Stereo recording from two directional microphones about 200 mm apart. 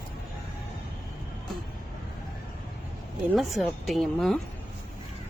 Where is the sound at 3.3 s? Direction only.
Centre (ahead or behind).